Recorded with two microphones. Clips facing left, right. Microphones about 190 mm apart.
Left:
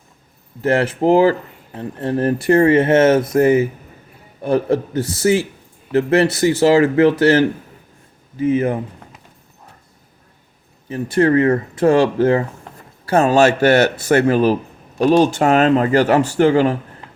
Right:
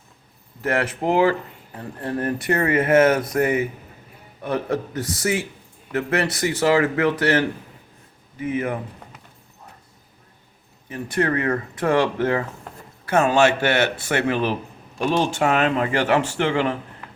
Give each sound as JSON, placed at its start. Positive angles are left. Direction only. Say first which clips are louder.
{"t": 0.6, "sound": "speech", "louder": "left 7 dB", "side_deg": 30}
{"t": 10.8, "sound": "speech", "louder": "left 7 dB", "side_deg": 30}